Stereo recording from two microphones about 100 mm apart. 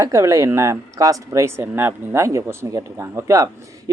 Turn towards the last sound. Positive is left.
turn(degrees=-30)  # may be behind; listen again after turning